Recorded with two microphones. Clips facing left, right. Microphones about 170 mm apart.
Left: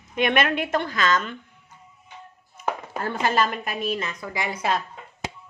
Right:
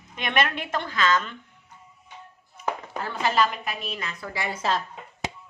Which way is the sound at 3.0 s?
45° left (ahead or behind).